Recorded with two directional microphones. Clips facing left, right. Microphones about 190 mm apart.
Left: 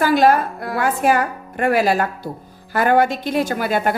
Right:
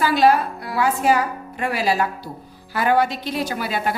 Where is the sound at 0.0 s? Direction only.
50° left (ahead or behind).